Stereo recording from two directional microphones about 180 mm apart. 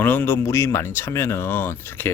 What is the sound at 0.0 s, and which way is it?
Speech, 10° left (ahead or behind).